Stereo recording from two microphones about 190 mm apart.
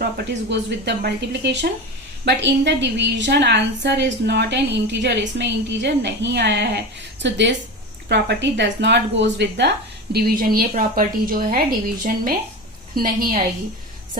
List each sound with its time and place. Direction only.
0.0 s a woman's voice: 65° right (ahead or behind); by 11.6 s 50° right (ahead or behind)
12.9 s a woman's voice: 50° right (ahead or behind)